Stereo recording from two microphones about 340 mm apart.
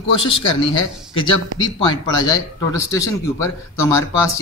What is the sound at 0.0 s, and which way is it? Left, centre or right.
Speech, centre.